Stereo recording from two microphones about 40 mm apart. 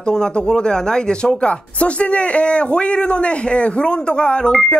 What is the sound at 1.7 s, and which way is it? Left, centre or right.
Speech, left.